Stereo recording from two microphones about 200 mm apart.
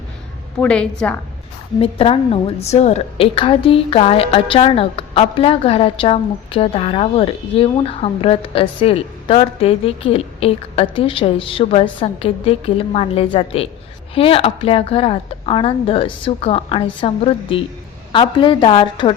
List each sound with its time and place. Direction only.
0.6 s a woman's voice: 5° left (ahead or behind)
1.8 s a woman's voice: 30° left (ahead or behind)